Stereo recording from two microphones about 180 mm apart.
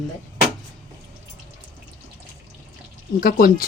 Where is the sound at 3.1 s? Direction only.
55° left (ahead or behind).